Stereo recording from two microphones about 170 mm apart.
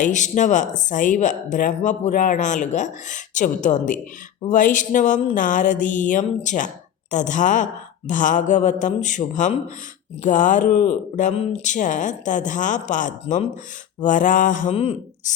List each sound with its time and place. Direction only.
0.0 s speech: 45° left (ahead or behind)